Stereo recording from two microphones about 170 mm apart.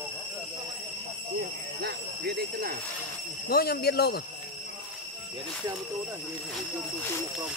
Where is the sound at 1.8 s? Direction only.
75° right (ahead or behind).